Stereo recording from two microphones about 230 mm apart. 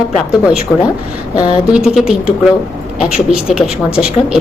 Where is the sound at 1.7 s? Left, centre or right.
Centre.